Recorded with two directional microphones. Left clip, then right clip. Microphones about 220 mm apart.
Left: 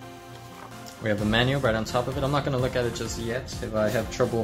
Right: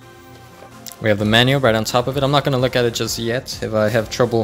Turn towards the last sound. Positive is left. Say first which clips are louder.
# right 8 dB
turn(degrees=-45)  # may be behind; listen again after turning